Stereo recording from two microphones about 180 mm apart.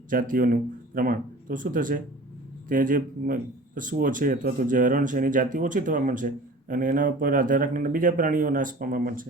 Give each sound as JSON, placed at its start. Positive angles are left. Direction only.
{"t": 0.1, "sound": "a man's voice", "side_deg": -50}